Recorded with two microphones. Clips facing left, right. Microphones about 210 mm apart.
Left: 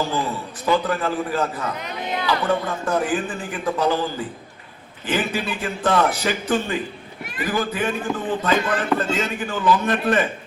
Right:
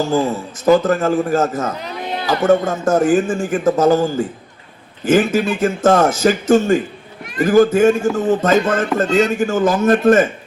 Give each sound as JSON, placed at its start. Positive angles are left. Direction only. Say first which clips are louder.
{"t": 0.0, "sound": "a man's voice", "louder": "right 7 dB", "side_deg": -45}
{"t": 1.7, "sound": "a man's voice", "louder": "right 3 dB", "side_deg": -35}